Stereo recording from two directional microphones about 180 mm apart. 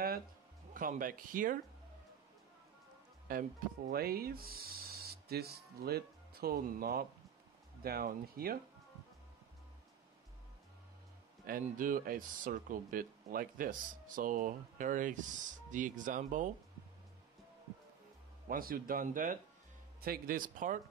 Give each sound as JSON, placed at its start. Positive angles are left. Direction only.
{"t": 0.7, "sound": "speech", "side_deg": -50}
{"t": 3.3, "sound": "speech", "side_deg": -50}
{"t": 11.4, "sound": "speech", "side_deg": -50}
{"t": 18.5, "sound": "speech", "side_deg": -55}